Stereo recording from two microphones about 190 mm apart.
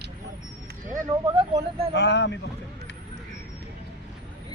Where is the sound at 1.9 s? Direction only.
65° left (ahead or behind).